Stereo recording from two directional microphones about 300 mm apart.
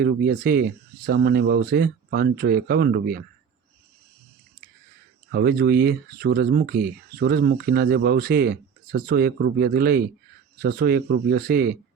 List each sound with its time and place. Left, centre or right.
0.0 s speech: right
5.3 s speech: right